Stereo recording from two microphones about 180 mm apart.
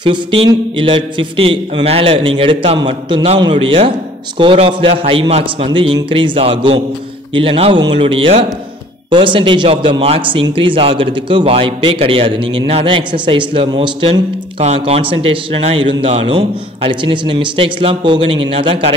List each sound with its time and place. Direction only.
0.0 s a man's voice: 30° right (ahead or behind)